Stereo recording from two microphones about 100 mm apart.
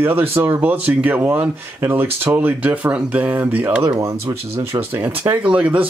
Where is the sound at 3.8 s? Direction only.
30° right (ahead or behind).